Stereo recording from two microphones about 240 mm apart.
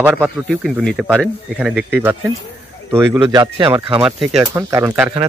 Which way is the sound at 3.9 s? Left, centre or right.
Centre.